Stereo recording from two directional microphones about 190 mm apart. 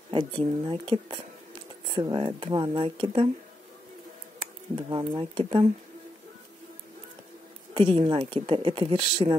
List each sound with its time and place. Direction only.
0.1 s speech: 25° right (ahead or behind)
4.4 s speech: 25° right (ahead or behind)
7.7 s speech: 25° right (ahead or behind)